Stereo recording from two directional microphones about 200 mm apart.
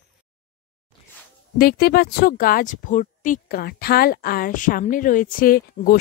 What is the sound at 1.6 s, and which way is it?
Speech, 50° left (ahead or behind).